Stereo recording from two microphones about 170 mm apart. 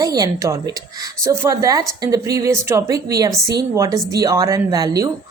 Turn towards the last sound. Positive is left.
turn(degrees=-20)  # may be behind; listen again after turning